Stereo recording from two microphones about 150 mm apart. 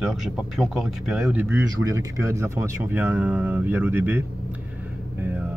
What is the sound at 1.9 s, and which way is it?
Speech, 20° right (ahead or behind).